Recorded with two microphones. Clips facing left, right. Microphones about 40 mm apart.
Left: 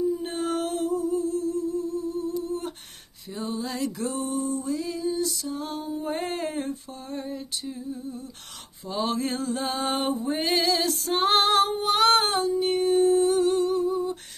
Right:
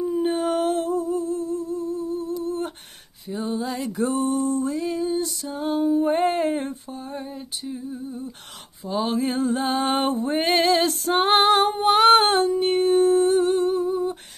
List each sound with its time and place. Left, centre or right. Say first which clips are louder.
0.2 s humming: right 6 dB; right
3.3 s a sound: right 4 dB; centre
3.9 s music: right 6 dB; right
4.2 s music: right 4 dB; right
5.0 s female singing: even; right
5.4 s music: right 8 dB; right
6.9 s a sound: right 1 dB; centre
9.4 s music: right 5 dB; right
9.9 s a sound: right 4 dB; right
11.2 s music: right 3 dB; right
11.8 s humming: right 5 dB; right